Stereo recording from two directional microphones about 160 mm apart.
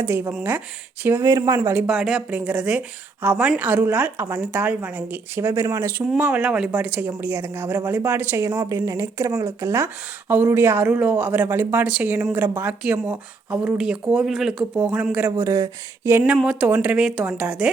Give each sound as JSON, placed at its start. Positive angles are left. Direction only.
{"t": 0.0, "sound": "speech", "side_deg": -10}
{"t": 1.9, "sound": "speech", "side_deg": 0}
{"t": 14.8, "sound": "speech", "side_deg": -15}
{"t": 15.4, "sound": "speech", "side_deg": -20}